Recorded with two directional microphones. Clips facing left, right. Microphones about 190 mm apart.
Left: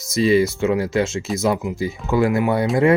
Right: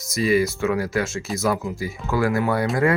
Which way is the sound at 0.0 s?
25° left (ahead or behind).